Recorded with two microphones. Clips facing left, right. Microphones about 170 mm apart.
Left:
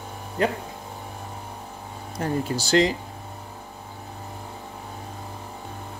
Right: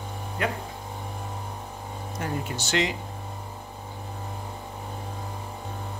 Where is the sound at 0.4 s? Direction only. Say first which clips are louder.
Left 5 dB; 35° left (ahead or behind).